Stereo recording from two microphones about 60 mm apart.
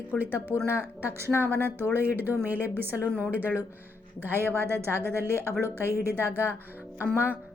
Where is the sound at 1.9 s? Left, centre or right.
Right.